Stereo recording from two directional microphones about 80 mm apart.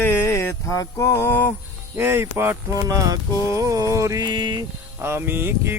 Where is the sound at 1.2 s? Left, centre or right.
Left.